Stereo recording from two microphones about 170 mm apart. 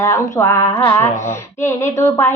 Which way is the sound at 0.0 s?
15° left (ahead or behind).